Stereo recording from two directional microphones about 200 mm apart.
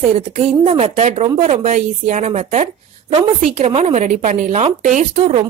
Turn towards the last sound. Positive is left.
turn(degrees=-35)  # may be behind; listen again after turning